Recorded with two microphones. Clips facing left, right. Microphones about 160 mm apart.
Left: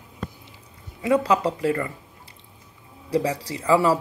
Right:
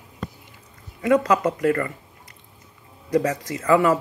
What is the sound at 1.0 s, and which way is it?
Speech, 25° left (ahead or behind).